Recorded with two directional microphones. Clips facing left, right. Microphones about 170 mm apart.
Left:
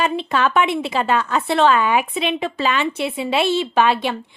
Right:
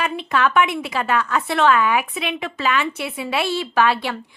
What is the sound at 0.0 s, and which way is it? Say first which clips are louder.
A woman's voice: left 2 dB; 30° left (ahead or behind).